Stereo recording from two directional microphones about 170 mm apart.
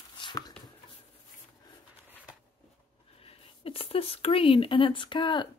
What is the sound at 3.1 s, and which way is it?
Speech, 35° left (ahead or behind).